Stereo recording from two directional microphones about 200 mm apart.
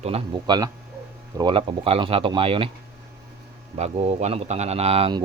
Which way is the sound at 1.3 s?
25° right (ahead or behind).